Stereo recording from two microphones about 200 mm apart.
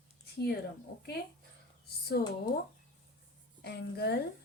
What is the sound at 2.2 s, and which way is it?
Speech, 50° left (ahead or behind).